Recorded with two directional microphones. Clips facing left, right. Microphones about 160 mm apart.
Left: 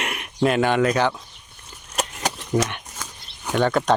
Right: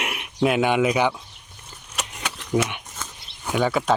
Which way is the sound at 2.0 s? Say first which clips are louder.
Left 6 dB; 40° left (ahead or behind).